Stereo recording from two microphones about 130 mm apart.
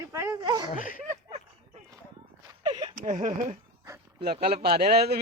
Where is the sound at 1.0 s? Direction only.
60° right (ahead or behind).